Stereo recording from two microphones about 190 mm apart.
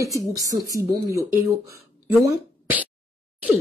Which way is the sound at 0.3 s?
15° right (ahead or behind).